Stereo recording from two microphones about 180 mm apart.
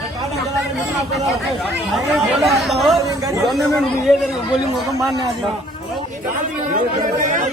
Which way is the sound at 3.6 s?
Centre (ahead or behind).